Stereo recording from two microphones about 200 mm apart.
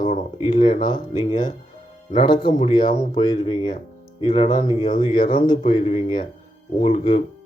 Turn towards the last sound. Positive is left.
turn(degrees=35)  # may be behind; listen again after turning